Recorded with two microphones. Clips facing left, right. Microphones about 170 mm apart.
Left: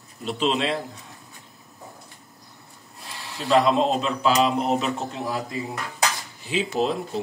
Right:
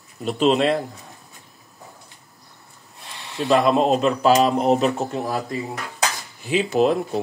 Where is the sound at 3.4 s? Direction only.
55° right (ahead or behind).